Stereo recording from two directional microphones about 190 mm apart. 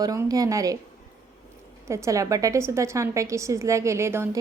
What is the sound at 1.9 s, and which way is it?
A woman's voice, 15° right (ahead or behind).